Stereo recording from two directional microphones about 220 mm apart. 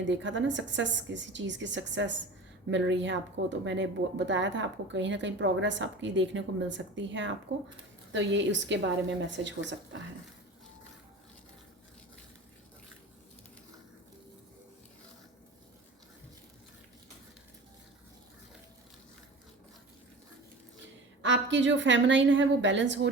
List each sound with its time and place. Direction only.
0.0 s a woman's voice: 55° right (ahead or behind)
21.2 s a woman's voice: 55° right (ahead or behind)